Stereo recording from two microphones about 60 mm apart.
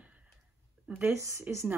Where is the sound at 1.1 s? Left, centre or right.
Right.